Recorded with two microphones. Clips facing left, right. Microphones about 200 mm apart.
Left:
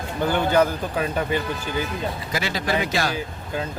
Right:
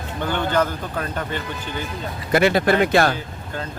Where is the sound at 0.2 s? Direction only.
10° left (ahead or behind).